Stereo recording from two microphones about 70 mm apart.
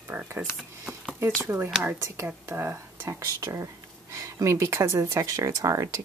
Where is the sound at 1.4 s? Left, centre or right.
Right.